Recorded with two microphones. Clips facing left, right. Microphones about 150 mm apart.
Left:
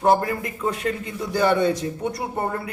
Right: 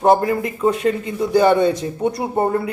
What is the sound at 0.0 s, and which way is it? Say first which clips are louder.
A man's voice: right 4 dB; 20° right (ahead or behind).